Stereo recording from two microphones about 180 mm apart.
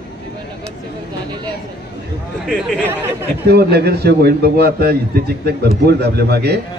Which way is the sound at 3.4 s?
65° right (ahead or behind).